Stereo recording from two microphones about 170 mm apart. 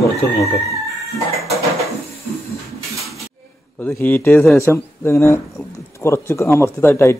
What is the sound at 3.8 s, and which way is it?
Speech, 15° left (ahead or behind).